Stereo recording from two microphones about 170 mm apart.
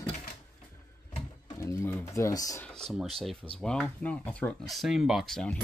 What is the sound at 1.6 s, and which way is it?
Speech, 15° left (ahead or behind).